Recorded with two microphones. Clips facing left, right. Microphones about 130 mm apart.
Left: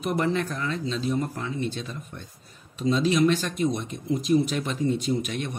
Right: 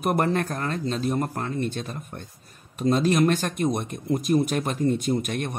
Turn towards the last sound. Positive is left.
turn(degrees=-50)  # may be behind; listen again after turning